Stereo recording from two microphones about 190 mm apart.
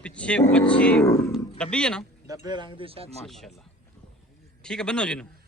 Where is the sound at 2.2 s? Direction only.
20° right (ahead or behind).